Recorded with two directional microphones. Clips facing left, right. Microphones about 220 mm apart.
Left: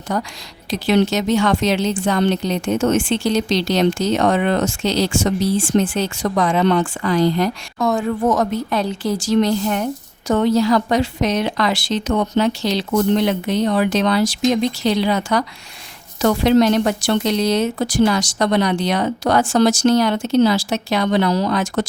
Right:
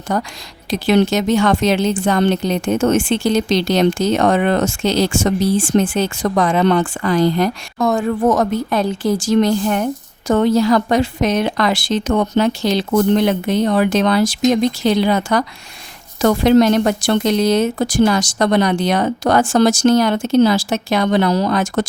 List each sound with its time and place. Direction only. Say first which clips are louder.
0.1 s a woman's voice: right 2 dB; 50° right (ahead or behind)